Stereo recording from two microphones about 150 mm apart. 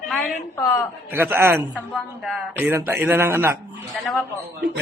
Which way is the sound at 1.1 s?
15° right (ahead or behind).